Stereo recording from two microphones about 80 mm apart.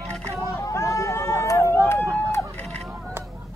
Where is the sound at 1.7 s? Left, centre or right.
Left.